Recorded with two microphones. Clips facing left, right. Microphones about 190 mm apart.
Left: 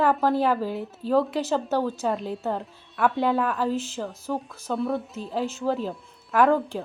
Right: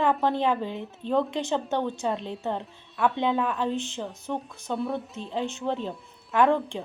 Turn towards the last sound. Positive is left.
turn(degrees=5)  # may be behind; listen again after turning